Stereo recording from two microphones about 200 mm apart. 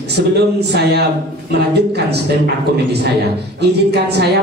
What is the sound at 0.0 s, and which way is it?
A woman's voice, 55° right (ahead or behind).